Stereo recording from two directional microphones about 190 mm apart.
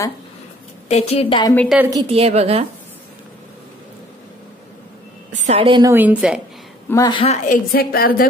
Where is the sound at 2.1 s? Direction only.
35° right (ahead or behind).